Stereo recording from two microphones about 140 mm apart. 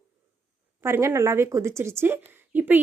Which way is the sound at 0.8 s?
20° right (ahead or behind).